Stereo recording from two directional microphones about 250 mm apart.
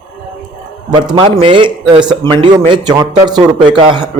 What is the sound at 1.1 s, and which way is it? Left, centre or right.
A man's voice, centre.